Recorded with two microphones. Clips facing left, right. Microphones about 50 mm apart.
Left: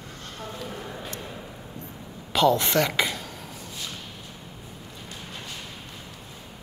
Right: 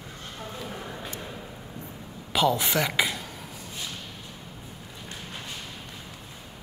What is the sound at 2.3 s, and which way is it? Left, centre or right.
Speech, centre.